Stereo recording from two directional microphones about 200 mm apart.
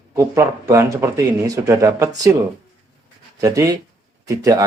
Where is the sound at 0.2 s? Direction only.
15° right (ahead or behind).